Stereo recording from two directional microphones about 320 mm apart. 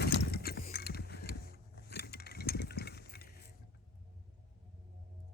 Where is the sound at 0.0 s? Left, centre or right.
Left.